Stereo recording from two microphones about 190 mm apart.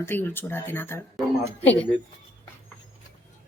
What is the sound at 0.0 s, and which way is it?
Speech, 10° left (ahead or behind).